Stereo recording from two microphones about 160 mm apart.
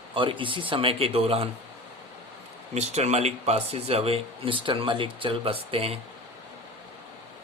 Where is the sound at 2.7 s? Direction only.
45° right (ahead or behind).